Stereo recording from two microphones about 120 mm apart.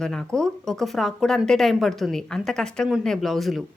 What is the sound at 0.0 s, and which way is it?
A woman's voice, 5° left (ahead or behind).